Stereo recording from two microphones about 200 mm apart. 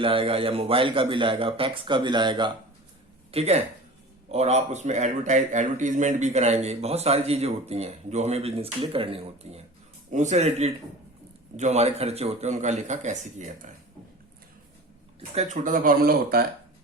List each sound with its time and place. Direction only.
0.0 s a man's voice: 25° right (ahead or behind)
15.4 s speech: 40° right (ahead or behind)